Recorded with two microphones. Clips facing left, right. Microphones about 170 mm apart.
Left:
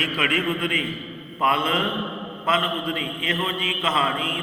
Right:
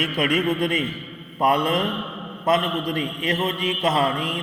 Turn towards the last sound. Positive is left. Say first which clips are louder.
# right 4 dB
turn(degrees=-40)  # may be behind; listen again after turning